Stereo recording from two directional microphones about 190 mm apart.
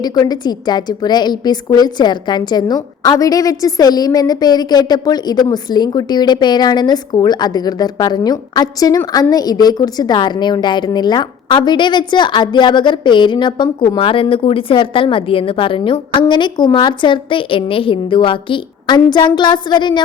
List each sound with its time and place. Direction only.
0.0 s a woman's voice: 20° left (ahead or behind)